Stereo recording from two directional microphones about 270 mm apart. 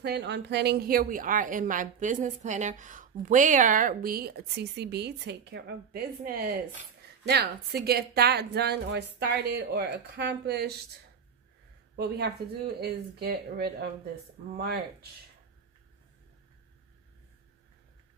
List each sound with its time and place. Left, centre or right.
0.0 s a woman's voice: right
11.9 s a woman's voice: right